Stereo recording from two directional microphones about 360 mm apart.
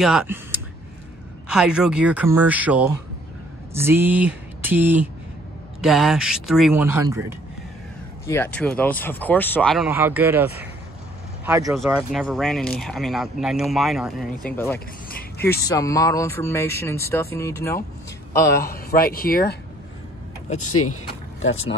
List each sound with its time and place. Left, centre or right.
0.0 s speech: centre
8.3 s speech: centre
15.6 s a sound: centre
18.3 s speech: left
20.6 s speech: left